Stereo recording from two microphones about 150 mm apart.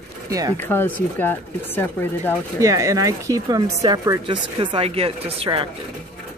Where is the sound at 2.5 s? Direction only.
20° right (ahead or behind).